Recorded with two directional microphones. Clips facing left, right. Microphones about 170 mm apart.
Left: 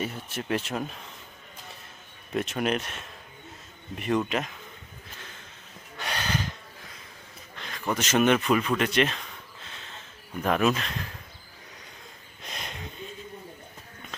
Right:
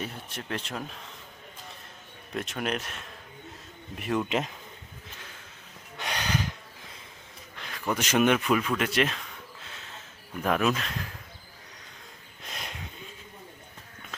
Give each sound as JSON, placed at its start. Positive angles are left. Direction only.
{"t": 0.0, "sound": "speech", "side_deg": 5}
{"t": 2.3, "sound": "speech", "side_deg": 0}
{"t": 4.3, "sound": "speech", "side_deg": -25}
{"t": 6.0, "sound": "snort", "side_deg": -15}
{"t": 7.5, "sound": "speech", "side_deg": -10}
{"t": 8.8, "sound": "a sound", "side_deg": -5}
{"t": 10.4, "sound": "speech", "side_deg": 0}
{"t": 12.5, "sound": "a sound", "side_deg": -5}